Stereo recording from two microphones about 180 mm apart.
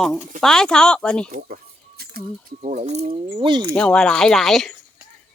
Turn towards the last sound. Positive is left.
turn(degrees=0)  # may be behind; listen again after turning